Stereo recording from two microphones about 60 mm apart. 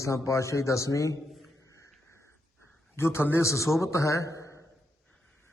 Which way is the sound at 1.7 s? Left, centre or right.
Left.